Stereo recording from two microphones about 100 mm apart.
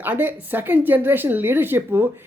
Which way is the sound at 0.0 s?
20° right (ahead or behind).